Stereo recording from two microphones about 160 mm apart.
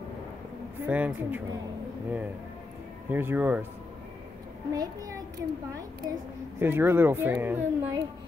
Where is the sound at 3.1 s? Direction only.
15° right (ahead or behind).